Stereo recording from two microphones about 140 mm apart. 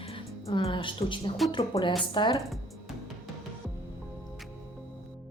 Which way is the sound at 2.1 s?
35° left (ahead or behind).